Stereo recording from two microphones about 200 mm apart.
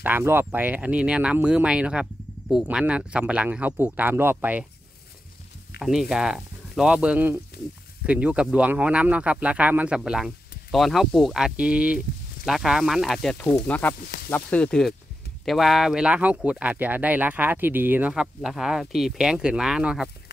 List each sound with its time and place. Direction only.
0.0 s speech: 10° right (ahead or behind)
5.8 s speech: 5° right (ahead or behind)